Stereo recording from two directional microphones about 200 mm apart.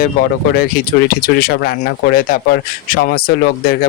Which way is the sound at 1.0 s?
50° left (ahead or behind).